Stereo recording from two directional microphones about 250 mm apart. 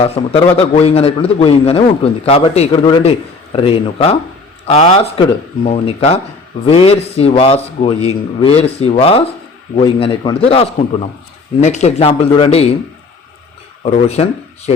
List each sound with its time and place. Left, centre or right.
0.0 s a man's voice: left
13.8 s a man's voice: left